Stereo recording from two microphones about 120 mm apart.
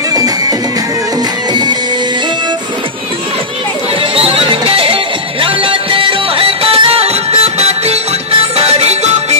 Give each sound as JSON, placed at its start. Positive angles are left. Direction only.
{"t": 0.1, "sound": "music", "side_deg": -30}
{"t": 4.1, "sound": "music", "side_deg": -50}